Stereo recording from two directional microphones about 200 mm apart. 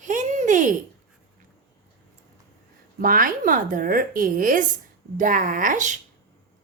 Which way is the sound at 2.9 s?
45° right (ahead or behind).